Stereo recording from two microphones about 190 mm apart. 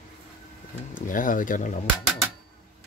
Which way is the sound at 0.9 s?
45° left (ahead or behind).